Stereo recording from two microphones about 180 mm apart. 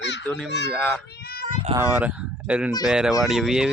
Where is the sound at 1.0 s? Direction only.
60° left (ahead or behind).